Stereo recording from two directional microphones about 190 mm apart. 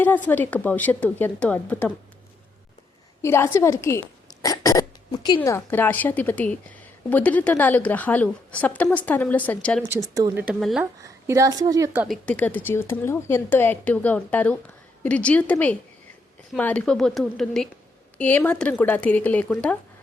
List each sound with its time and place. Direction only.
0.0 s a woman's voice: 10° left (ahead or behind)
3.2 s a woman's voice: 15° left (ahead or behind)
4.4 s burping: 20° left (ahead or behind)
5.4 s a woman's voice: 10° left (ahead or behind)
9.9 s a woman's voice: 20° right (ahead or behind)
10.4 s speech: centre (ahead or behind)
11.3 s a woman's voice: 15° right (ahead or behind)
12.0 s a woman's voice: 5° left (ahead or behind)